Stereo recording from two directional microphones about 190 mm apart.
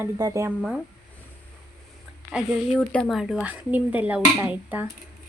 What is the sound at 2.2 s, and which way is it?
Speech, 5° left (ahead or behind).